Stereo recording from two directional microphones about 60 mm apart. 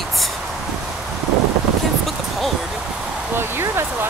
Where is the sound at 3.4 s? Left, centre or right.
Right.